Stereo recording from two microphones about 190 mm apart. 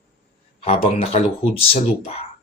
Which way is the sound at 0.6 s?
30° left (ahead or behind).